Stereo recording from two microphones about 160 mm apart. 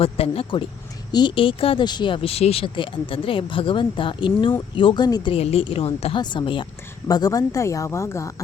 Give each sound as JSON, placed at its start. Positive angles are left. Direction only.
{"t": 0.0, "sound": "a woman's voice", "side_deg": 35}